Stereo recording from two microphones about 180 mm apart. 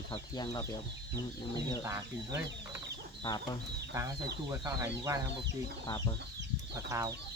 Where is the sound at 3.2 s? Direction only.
25° left (ahead or behind).